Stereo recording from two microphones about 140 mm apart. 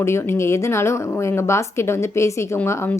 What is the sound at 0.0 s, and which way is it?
A woman's voice, 20° left (ahead or behind).